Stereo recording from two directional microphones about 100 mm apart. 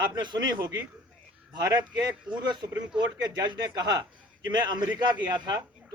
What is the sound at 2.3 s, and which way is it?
Speech, 45° right (ahead or behind).